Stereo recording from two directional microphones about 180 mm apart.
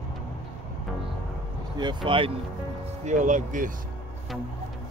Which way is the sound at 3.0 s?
40° right (ahead or behind).